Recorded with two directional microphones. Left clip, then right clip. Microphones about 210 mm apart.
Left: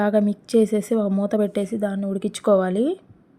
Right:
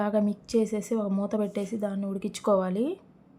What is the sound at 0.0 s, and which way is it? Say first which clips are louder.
Speech: left 7 dB; 15° left (ahead or behind).